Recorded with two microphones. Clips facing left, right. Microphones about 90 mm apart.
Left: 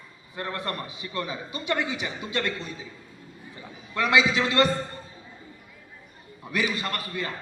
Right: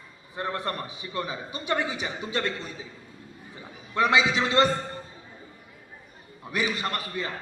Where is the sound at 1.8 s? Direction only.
30° right (ahead or behind).